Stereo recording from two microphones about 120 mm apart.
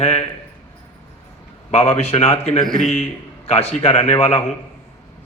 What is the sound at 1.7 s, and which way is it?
A man's voice, 60° left (ahead or behind).